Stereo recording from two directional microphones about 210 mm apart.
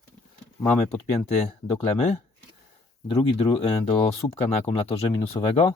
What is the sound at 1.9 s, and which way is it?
Speech, 35° left (ahead or behind).